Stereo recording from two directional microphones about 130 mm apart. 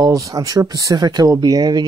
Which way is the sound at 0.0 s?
30° right (ahead or behind).